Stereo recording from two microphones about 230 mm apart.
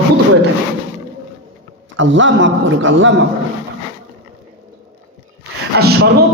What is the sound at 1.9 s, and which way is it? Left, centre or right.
A woman's voice, right.